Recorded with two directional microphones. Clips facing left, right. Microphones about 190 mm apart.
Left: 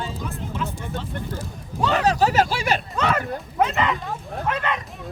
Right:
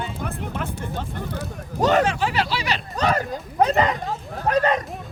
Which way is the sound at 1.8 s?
40° right (ahead or behind).